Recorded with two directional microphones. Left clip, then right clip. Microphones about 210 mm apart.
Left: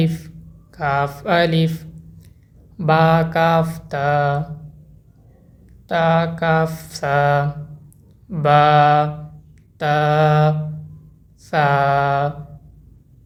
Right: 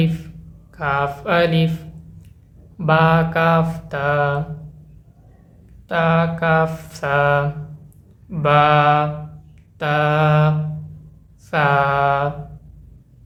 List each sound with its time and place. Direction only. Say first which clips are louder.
0.0 s mantra: even; 20° left (ahead or behind)
5.9 s mantra: left 1 dB; 20° left (ahead or behind)